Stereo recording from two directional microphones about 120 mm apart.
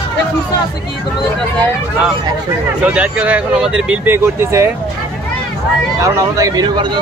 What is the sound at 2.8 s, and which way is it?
Speech, 10° right (ahead or behind).